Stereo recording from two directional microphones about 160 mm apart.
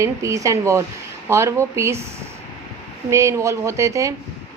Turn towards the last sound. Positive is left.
turn(degrees=-20)  # may be behind; listen again after turning